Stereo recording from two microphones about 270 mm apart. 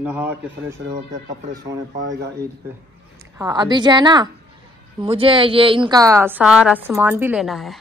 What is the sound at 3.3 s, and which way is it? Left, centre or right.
A woman's voice, centre.